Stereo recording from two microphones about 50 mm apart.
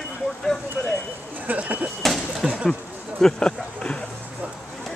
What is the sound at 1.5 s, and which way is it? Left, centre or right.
Speech, right.